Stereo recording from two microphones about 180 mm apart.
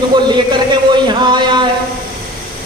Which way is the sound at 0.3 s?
25° right (ahead or behind).